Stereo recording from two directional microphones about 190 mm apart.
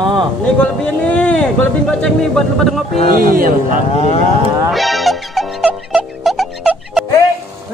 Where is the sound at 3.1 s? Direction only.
45° right (ahead or behind).